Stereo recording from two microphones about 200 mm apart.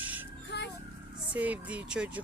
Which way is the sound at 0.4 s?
60° left (ahead or behind).